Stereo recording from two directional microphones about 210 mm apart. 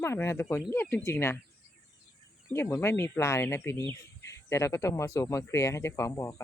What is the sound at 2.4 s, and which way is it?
Speech, 10° left (ahead or behind).